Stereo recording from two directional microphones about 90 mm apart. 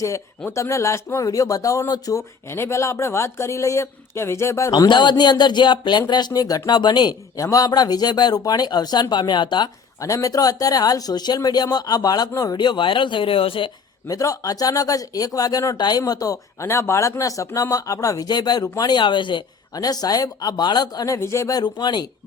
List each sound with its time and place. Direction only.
0.4 s speech: 35° left (ahead or behind)
4.7 s speech: 55° left (ahead or behind)
7.3 s speech: 40° left (ahead or behind); by 9.6 s 60° left (ahead or behind)
10.0 s speech: 40° left (ahead or behind)
12.5 s speech: 60° left (ahead or behind); by 13.7 s 85° left
14.1 s speech: 40° left (ahead or behind); by 19.4 s 60° left (ahead or behind)
19.7 s speech: 45° left (ahead or behind)
21.2 s speech: 30° left (ahead or behind)
21.6 s speech: 55° left (ahead or behind)